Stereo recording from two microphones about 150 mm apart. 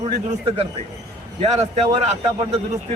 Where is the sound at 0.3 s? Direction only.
40° right (ahead or behind).